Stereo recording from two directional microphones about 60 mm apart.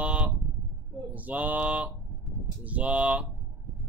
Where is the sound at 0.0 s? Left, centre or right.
Right.